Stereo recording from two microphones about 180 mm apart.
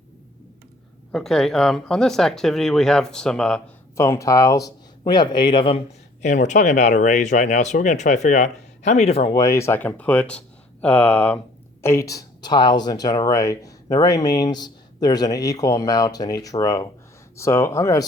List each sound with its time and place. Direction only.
1.1 s speech: centre (ahead or behind)
3.9 s speech: 15° left (ahead or behind)
6.2 s speech: 40° left (ahead or behind); by 18.0 s 15° left (ahead or behind)